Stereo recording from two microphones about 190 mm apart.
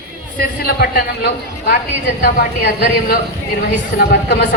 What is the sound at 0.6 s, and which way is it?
A man's voice, 55° left (ahead or behind).